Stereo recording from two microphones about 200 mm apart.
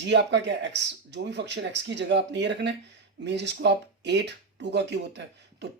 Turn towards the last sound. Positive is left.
turn(degrees=-60)  # may be behind; listen again after turning